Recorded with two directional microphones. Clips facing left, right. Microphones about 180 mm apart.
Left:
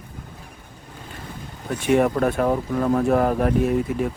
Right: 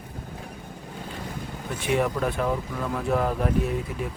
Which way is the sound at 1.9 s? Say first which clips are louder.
Left 6 dB; 50° left (ahead or behind).